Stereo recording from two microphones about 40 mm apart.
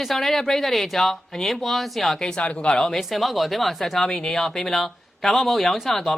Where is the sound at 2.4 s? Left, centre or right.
Left.